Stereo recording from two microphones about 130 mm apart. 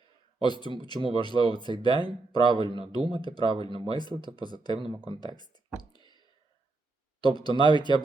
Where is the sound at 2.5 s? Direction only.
40° right (ahead or behind).